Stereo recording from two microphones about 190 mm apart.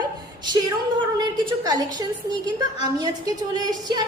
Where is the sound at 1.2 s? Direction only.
20° right (ahead or behind).